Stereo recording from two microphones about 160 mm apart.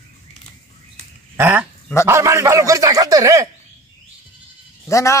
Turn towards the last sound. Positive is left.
turn(degrees=20)  # may be behind; listen again after turning